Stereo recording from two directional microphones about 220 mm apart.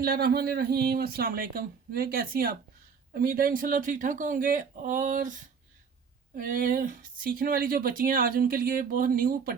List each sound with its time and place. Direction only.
0.0 s speech: 45° right (ahead or behind)